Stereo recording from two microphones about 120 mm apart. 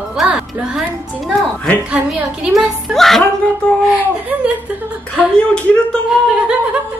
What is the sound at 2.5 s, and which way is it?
Speech, centre (ahead or behind).